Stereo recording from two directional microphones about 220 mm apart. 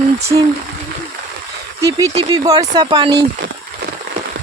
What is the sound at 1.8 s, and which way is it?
Speech, 15° right (ahead or behind).